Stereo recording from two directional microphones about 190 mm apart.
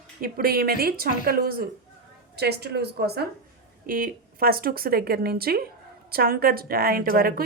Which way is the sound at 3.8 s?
45° right (ahead or behind).